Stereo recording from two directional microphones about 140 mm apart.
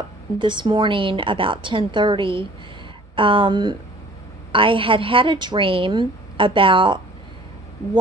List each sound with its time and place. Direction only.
0.4 s a woman's voice: 35° right (ahead or behind)